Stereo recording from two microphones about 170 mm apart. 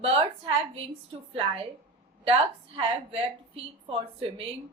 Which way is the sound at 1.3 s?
35° right (ahead or behind).